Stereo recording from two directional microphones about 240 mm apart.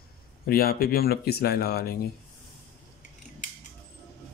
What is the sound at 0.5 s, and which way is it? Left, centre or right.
Speech, left.